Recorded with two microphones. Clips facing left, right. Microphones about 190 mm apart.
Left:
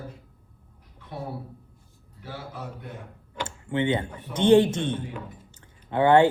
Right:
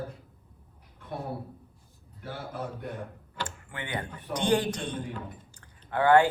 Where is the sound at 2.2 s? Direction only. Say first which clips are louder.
Even; 55° right (ahead or behind).